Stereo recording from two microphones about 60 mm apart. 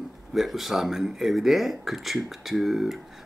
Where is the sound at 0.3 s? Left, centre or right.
Centre.